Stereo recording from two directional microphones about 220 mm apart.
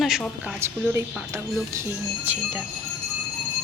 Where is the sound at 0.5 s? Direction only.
10° right (ahead or behind).